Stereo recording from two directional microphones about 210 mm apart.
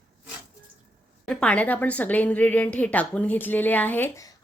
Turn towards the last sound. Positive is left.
turn(degrees=10)  # may be behind; listen again after turning